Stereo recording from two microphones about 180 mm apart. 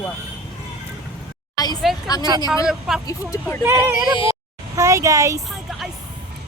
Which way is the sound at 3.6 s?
10° right (ahead or behind).